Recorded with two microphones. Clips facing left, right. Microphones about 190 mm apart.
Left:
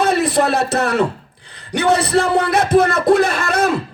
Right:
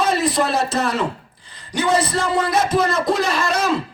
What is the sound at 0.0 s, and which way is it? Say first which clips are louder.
A man's voice: left 3 dB; 65° left (ahead or behind).